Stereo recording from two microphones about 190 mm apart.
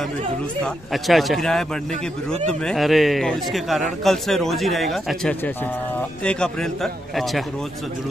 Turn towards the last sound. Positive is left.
turn(degrees=0)  # may be behind; listen again after turning